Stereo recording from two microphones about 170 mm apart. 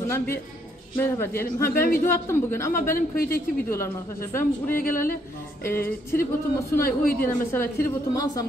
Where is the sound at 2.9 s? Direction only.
60° left (ahead or behind).